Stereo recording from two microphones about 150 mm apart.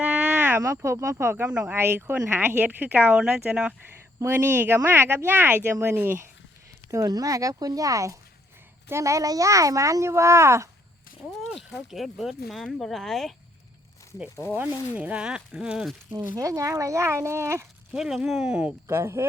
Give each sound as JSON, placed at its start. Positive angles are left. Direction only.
{"t": 0.0, "sound": "speech", "side_deg": -10}
{"t": 4.2, "sound": "a child's voice", "side_deg": -15}
{"t": 11.4, "sound": "speech", "side_deg": 0}
{"t": 14.5, "sound": "speech", "side_deg": -10}
{"t": 16.1, "sound": "a child's voice", "side_deg": -25}
{"t": 17.9, "sound": "speech", "side_deg": -5}